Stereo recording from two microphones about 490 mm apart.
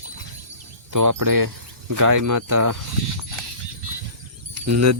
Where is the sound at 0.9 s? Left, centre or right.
Right.